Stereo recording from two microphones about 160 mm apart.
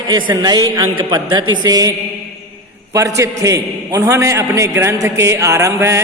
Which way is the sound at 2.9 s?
20° right (ahead or behind).